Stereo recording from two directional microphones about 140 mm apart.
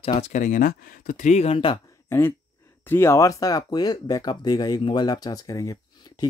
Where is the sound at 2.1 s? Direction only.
15° left (ahead or behind).